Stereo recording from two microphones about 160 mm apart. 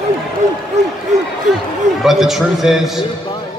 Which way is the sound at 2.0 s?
Centre (ahead or behind).